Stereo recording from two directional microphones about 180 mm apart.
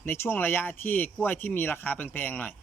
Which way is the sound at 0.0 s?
15° left (ahead or behind).